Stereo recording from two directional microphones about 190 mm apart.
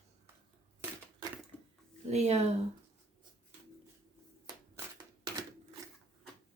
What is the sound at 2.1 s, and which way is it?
Speech, 35° right (ahead or behind).